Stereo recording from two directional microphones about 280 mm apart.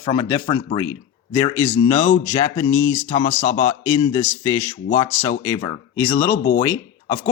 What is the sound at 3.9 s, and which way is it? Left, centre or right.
A man's voice, centre.